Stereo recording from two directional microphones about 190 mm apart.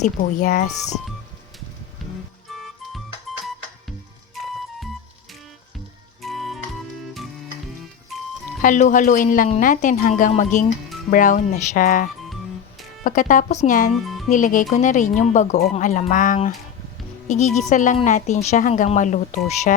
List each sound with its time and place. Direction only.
0.0 s speech: 40° left (ahead or behind)
2.5 s music: centre (ahead or behind)
6.3 s music: centre (ahead or behind)
8.1 s music: centre (ahead or behind)
8.6 s speech: 40° left (ahead or behind)
13.9 s speech: centre (ahead or behind)
14.3 s speech: 40° left (ahead or behind)